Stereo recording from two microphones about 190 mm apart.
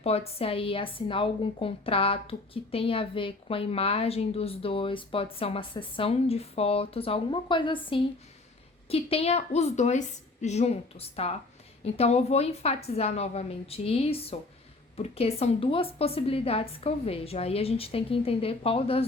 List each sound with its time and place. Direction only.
0.0 s a woman's voice: 30° left (ahead or behind)